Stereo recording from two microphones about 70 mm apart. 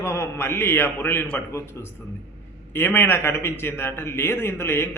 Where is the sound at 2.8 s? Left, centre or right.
Left.